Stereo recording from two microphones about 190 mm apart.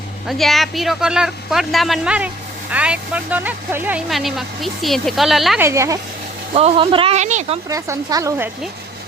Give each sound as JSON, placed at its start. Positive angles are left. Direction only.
{"t": 0.3, "sound": "speech", "side_deg": 0}
{"t": 5.5, "sound": "speech", "side_deg": -15}
{"t": 6.5, "sound": "speech", "side_deg": -30}
{"t": 7.7, "sound": "speech", "side_deg": -15}